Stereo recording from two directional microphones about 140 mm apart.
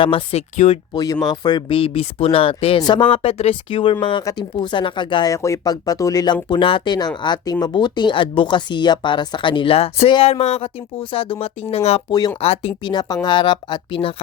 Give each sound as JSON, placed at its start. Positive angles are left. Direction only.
{"t": 0.0, "sound": "speech", "side_deg": 40}
{"t": 0.9, "sound": "speech", "side_deg": 25}
{"t": 2.8, "sound": "speech", "side_deg": 35}
{"t": 12.9, "sound": "speech", "side_deg": 30}